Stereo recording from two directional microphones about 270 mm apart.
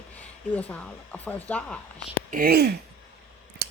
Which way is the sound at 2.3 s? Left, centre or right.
Right.